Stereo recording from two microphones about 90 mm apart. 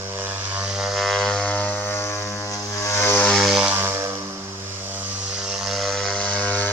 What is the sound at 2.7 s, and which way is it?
Vehicle, 30° left (ahead or behind).